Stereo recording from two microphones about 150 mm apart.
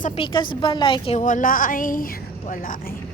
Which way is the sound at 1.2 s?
60° left (ahead or behind).